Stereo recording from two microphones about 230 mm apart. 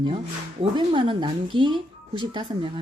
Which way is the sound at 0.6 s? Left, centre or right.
Right.